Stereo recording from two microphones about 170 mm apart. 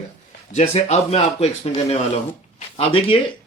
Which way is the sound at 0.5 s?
40° left (ahead or behind).